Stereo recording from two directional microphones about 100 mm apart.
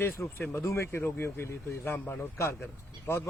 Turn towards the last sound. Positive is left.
turn(degrees=20)  # may be behind; listen again after turning